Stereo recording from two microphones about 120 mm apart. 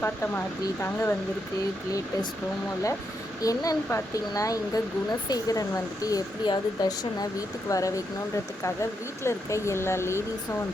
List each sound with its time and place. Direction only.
0.0 s speech: 15° left (ahead or behind)
3.4 s speech: 30° left (ahead or behind)